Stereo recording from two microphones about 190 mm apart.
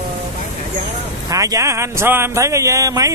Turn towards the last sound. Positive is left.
turn(degrees=-20)  # may be behind; listen again after turning